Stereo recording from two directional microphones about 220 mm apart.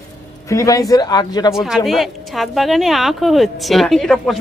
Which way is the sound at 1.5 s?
Centre (ahead or behind).